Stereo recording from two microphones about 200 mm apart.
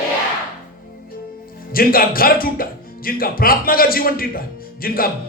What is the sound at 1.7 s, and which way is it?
Speech, 45° left (ahead or behind).